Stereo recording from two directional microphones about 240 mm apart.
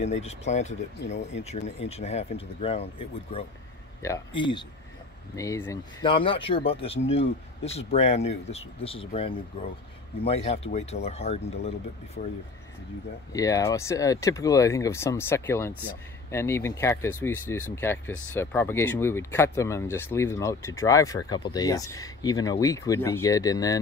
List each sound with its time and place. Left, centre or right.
0.0 s speech: left
12.2 s speech: left
13.3 s speech: centre